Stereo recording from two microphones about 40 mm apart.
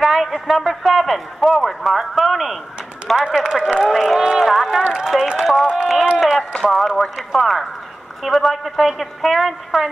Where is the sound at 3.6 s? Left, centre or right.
Centre.